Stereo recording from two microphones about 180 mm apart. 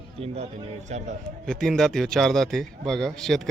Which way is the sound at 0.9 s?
40° right (ahead or behind).